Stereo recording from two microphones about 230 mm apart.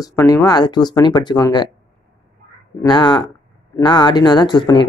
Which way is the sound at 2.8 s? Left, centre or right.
Centre.